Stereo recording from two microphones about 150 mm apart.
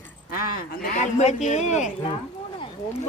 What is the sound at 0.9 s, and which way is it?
Speech, 50° left (ahead or behind).